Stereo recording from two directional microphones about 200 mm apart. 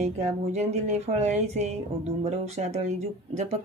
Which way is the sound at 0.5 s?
35° right (ahead or behind).